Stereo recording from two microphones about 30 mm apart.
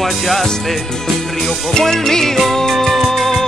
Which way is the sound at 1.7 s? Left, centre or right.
Centre.